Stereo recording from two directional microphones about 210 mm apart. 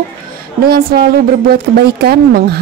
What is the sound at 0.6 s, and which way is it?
A woman's voice, 45° right (ahead or behind).